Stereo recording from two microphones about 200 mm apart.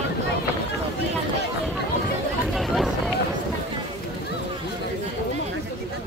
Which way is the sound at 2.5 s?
Centre (ahead or behind).